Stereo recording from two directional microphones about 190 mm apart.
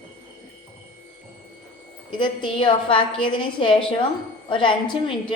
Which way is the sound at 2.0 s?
25° left (ahead or behind).